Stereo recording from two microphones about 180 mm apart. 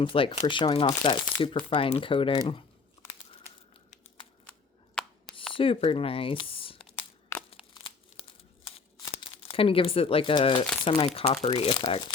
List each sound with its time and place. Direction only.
0.0 s speech: 30° left (ahead or behind)
5.2 s a sound: 30° left (ahead or behind)
5.5 s speech: 30° left (ahead or behind)
7.5 s crumpling: 30° left (ahead or behind)
10.8 s speech: 30° left (ahead or behind)